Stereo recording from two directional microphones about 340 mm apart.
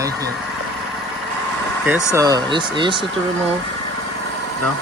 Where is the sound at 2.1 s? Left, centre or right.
Centre.